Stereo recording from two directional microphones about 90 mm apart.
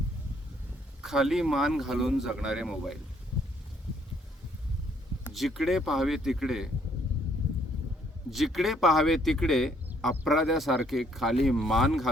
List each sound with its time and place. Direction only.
1.0 s speech: 5° right (ahead or behind)
5.3 s speech: centre (ahead or behind)
8.3 s speech: centre (ahead or behind)